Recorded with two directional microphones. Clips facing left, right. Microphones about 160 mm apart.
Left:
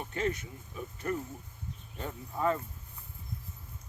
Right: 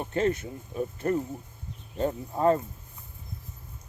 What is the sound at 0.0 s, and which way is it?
Speech, 30° right (ahead or behind).